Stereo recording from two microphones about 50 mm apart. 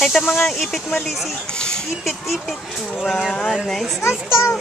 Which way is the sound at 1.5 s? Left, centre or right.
Centre.